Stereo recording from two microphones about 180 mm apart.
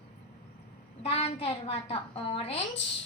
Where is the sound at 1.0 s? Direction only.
35° left (ahead or behind).